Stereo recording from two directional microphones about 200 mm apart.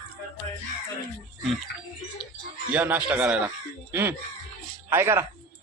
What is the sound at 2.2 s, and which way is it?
Speech, 25° left (ahead or behind).